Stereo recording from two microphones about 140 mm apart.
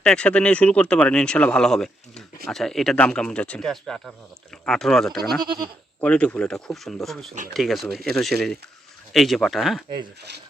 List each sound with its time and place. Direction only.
0.0 s speech: 5° left (ahead or behind)
5.4 s goat: 30° right (ahead or behind)
6.0 s speech: 10° left (ahead or behind)